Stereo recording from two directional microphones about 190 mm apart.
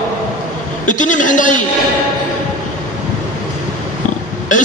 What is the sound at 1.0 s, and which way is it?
Speech, 45° left (ahead or behind).